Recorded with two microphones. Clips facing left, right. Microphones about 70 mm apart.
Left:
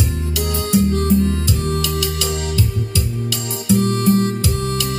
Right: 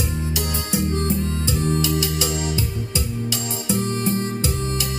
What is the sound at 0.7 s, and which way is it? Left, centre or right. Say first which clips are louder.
Music: left 7 dB; right.